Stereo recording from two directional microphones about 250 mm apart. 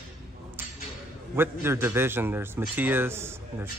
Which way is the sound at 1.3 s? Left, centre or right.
Centre.